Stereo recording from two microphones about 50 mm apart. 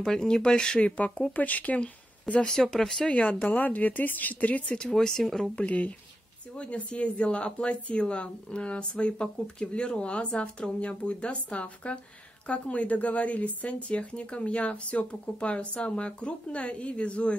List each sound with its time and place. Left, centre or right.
0.0 s speech: centre
2.5 s speech: centre
3.1 s speech: left
4.7 s speech: centre
5.6 s speech: left